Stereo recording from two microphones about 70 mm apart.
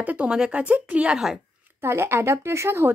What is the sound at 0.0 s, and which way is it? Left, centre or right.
A woman's voice, right.